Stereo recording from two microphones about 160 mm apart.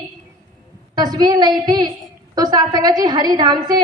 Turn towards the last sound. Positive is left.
turn(degrees=-25)  # may be behind; listen again after turning